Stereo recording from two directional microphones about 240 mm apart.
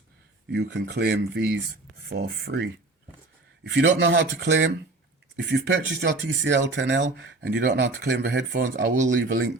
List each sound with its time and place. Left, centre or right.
0.5 s speech: right
9.0 s speech: right